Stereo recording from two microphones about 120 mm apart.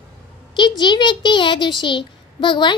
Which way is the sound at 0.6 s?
40° left (ahead or behind).